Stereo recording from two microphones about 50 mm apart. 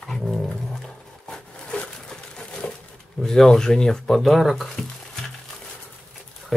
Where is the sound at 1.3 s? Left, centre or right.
Centre.